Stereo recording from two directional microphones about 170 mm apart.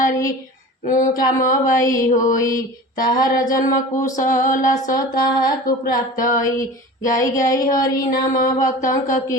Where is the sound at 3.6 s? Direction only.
50° left (ahead or behind).